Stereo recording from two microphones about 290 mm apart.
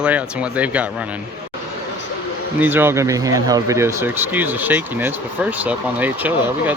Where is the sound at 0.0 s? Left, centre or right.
Centre.